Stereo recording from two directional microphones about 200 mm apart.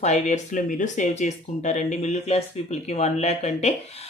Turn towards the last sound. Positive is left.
turn(degrees=35)  # may be behind; listen again after turning